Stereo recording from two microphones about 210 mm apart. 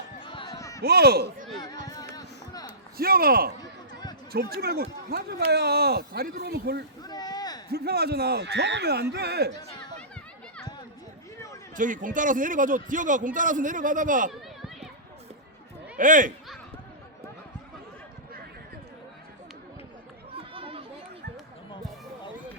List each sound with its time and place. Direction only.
0.2 s a sound: 25° left (ahead or behind)
0.8 s speech: 50° right (ahead or behind)
1.5 s speech: 20° left (ahead or behind)
1.9 s a sound: 20° left (ahead or behind)
3.0 s speech: 45° right (ahead or behind)
7.0 s a sound: 20° left (ahead or behind)
7.7 s speech: 50° right (ahead or behind)
11.8 s a man's voice: 40° right (ahead or behind)
14.3 s run: centre (ahead or behind)
16.0 s a man's voice: 40° right (ahead or behind)
20.3 s chatter: 25° right (ahead or behind)